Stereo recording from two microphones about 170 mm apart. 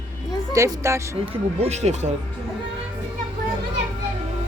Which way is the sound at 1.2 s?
40° right (ahead or behind).